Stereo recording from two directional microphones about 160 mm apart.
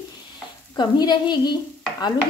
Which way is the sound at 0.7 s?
25° left (ahead or behind).